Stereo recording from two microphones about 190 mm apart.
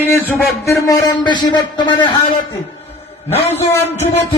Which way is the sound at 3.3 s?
35° left (ahead or behind).